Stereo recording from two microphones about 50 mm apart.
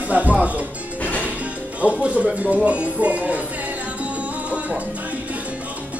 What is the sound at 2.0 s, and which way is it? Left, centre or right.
Speech, right.